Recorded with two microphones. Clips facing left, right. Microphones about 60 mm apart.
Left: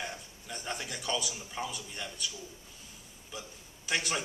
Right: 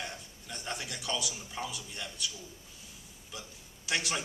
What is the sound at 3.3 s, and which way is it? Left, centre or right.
Speech, centre.